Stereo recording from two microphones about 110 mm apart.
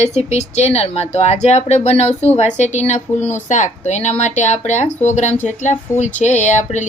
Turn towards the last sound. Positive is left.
turn(degrees=90)